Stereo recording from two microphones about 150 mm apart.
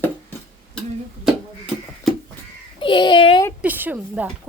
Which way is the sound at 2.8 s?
35° left (ahead or behind).